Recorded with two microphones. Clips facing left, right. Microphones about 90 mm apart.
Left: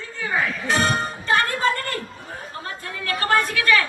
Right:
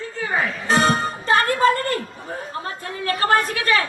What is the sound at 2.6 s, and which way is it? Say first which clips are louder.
Chatter: right 3 dB; 35° right (ahead or behind).